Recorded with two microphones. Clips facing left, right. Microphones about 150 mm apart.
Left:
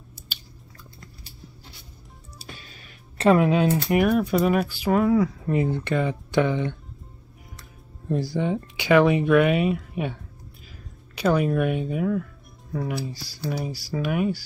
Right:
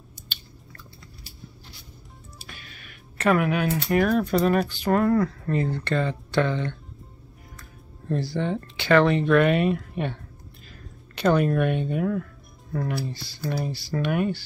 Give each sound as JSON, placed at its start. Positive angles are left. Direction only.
{"t": 2.4, "sound": "computer keyboard", "side_deg": 30}
{"t": 4.0, "sound": "speech", "side_deg": 10}
{"t": 8.1, "sound": "speech", "side_deg": 10}